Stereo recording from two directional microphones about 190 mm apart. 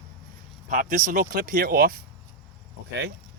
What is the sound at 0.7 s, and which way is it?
Speech, 45° right (ahead or behind).